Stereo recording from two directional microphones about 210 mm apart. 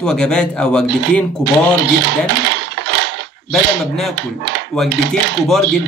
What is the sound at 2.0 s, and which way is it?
Coin, 55° right (ahead or behind).